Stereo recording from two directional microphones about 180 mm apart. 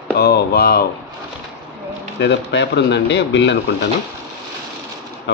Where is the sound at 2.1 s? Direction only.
70° left (ahead or behind).